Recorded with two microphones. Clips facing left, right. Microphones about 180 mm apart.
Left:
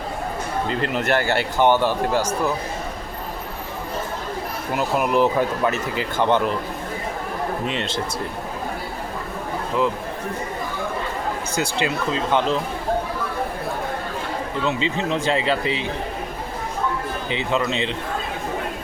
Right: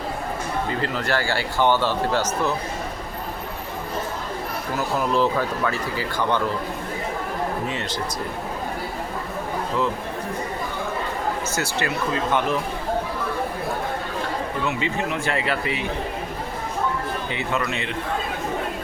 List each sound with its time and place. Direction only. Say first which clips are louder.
0.9 s speech: left 6 dB; 20° left (ahead or behind)
4.8 s speech: left 3 dB; 15° left (ahead or behind)
7.7 s speech: left 2 dB; 20° left (ahead or behind)
11.5 s speech: left 2 dB; 15° left (ahead or behind)
14.6 s speech: left 4 dB; 25° left (ahead or behind)
17.3 s speech: left 5 dB; 20° left (ahead or behind)